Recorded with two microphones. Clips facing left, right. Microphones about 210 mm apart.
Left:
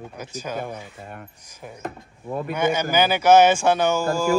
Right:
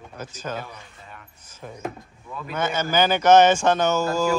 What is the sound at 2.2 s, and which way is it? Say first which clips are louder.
Speech: left 8 dB; 50° left (ahead or behind).